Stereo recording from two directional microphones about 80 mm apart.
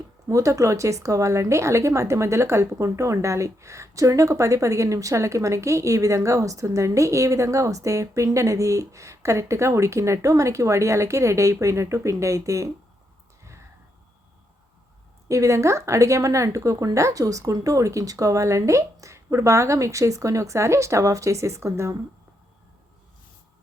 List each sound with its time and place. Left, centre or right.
0.3 s speech: right
15.3 s speech: right